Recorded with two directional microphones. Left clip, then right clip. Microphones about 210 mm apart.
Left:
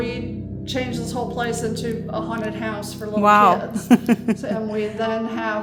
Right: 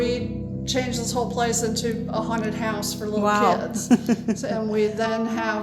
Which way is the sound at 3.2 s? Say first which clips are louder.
Left 6 dB; 30° left (ahead or behind).